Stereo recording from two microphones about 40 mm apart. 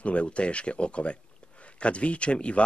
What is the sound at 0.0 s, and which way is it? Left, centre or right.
Speech, left.